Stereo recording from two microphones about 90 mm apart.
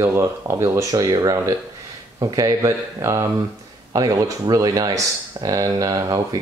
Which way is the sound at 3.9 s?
45° right (ahead or behind).